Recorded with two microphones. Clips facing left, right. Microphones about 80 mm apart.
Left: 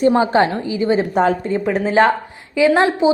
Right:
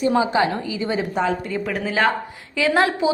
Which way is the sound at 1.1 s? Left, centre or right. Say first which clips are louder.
Left 6 dB; left.